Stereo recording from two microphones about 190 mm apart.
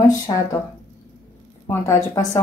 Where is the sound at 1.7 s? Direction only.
15° left (ahead or behind).